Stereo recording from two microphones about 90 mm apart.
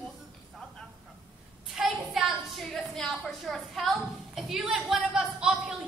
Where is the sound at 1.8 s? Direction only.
5° right (ahead or behind).